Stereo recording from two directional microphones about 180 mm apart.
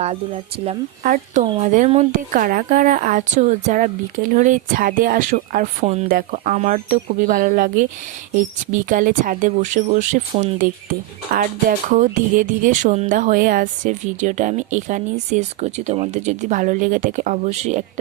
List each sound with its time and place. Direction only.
1.0 s speech: 45° right (ahead or behind)
11.9 s speech: 45° right (ahead or behind)